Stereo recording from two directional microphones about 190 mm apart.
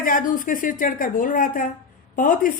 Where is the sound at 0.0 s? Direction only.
45° left (ahead or behind).